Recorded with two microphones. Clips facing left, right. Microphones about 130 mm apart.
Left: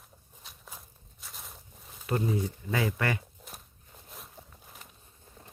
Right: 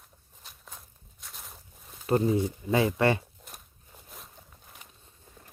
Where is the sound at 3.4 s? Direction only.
Centre (ahead or behind).